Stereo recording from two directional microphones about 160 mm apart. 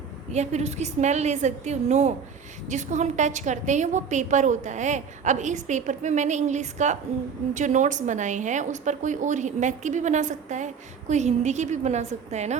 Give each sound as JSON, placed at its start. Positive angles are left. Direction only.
{"t": 0.3, "sound": "a woman's voice", "side_deg": -45}